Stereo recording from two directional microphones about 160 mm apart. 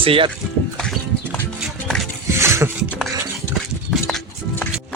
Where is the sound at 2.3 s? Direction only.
15° right (ahead or behind).